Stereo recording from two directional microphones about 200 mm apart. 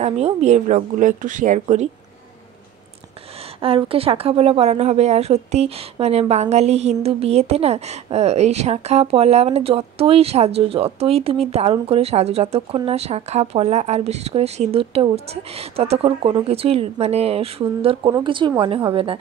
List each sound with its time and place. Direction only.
0.0 s speech: 35° right (ahead or behind)
3.6 s speech: 30° right (ahead or behind)